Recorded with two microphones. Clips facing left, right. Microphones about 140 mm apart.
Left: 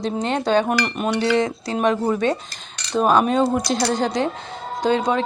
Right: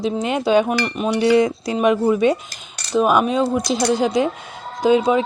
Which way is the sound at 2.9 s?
5° right (ahead or behind).